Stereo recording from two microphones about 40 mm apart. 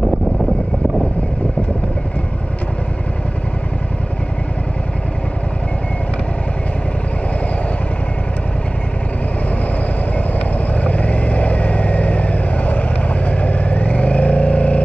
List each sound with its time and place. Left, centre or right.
10.7 s vehicle: left